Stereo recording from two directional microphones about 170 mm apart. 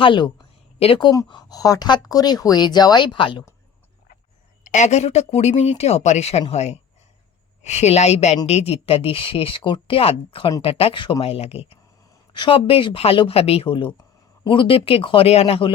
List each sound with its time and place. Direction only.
0.0 s speech: 30° left (ahead or behind)
4.6 s speech: 45° left (ahead or behind)